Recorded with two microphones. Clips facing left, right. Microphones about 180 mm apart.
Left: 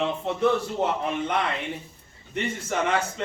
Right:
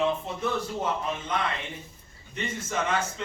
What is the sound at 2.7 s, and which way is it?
Speech, 70° left (ahead or behind).